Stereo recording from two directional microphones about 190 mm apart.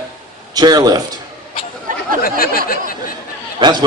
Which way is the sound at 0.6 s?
20° right (ahead or behind).